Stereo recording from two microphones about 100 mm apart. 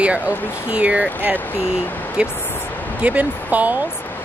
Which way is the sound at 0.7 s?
10° right (ahead or behind).